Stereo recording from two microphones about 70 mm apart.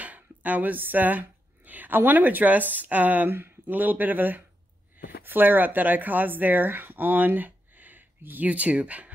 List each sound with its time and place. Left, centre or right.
0.0 s speech: right